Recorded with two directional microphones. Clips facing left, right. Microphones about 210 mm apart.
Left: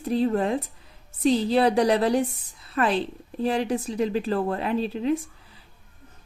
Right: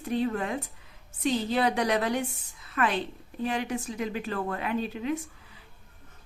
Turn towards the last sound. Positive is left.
turn(degrees=30)  # may be behind; listen again after turning